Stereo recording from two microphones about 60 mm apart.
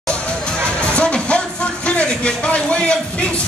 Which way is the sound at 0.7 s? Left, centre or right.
Centre.